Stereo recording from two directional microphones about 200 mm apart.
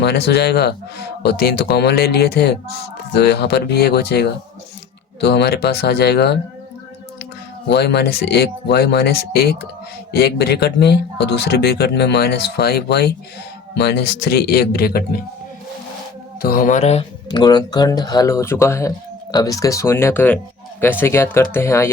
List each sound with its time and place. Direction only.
0.0 s speech: 55° left (ahead or behind)
7.7 s speech: 55° left (ahead or behind)
16.4 s speech: 45° left (ahead or behind)
17.4 s speech: 20° left (ahead or behind)